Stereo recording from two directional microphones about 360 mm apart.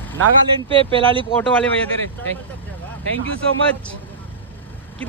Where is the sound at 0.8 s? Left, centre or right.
Centre.